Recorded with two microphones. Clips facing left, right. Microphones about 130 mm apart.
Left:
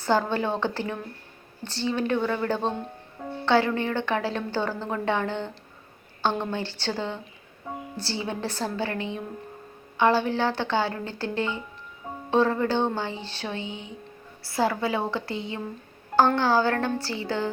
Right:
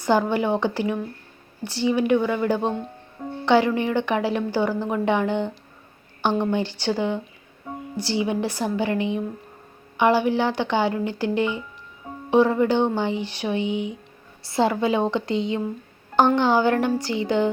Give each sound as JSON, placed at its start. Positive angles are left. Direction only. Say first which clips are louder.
{"t": 0.0, "sound": "a woman's voice", "louder": "right 3 dB", "side_deg": -15}